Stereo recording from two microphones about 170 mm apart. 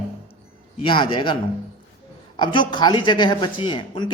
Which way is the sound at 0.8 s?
30° left (ahead or behind).